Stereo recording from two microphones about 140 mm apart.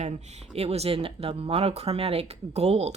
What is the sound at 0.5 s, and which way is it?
Speech, 45° right (ahead or behind).